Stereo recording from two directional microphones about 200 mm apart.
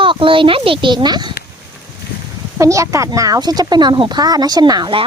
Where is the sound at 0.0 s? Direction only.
25° right (ahead or behind).